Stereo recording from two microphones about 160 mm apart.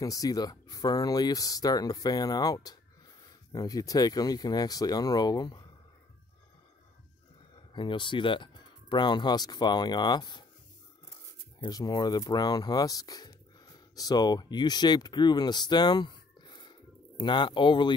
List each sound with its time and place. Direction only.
0.0 s speech: 20° left (ahead or behind)
7.5 s speech: 30° left (ahead or behind)
11.6 s speech: 25° left (ahead or behind)